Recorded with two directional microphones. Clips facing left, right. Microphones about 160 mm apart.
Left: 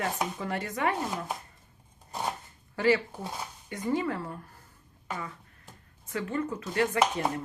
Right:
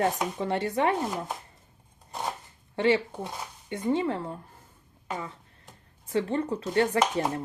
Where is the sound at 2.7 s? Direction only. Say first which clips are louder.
Right 1 dB; 25° right (ahead or behind).